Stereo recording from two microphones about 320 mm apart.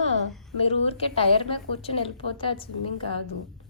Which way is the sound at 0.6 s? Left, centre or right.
Centre.